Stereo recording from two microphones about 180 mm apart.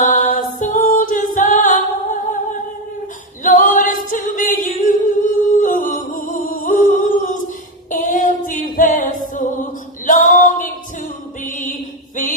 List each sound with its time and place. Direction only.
0.0 s music: 45° left (ahead or behind)
3.4 s a capella: 50° left (ahead or behind)
7.9 s music: 45° left (ahead or behind)
10.1 s singing: 45° left (ahead or behind)
11.4 s music: 45° left (ahead or behind)